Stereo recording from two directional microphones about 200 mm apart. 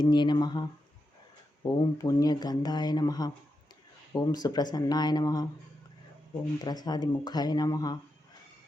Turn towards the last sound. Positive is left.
turn(degrees=20)  # may be behind; listen again after turning